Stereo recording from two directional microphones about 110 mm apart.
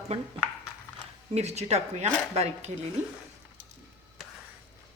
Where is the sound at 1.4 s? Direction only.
80° right.